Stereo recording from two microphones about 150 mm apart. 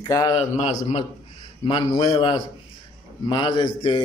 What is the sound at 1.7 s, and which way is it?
A man's voice, 35° left (ahead or behind).